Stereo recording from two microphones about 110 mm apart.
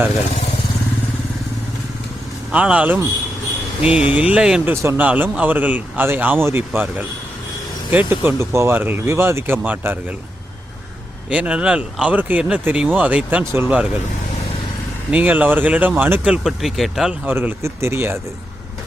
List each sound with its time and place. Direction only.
2.5 s speech: 10° right (ahead or behind)
4.7 s speech: 20° right (ahead or behind)
11.3 s speech: 10° right (ahead or behind)
13.4 s speech: 25° right (ahead or behind)
15.1 s speech: 15° right (ahead or behind)
17.2 s speech: 20° right (ahead or behind)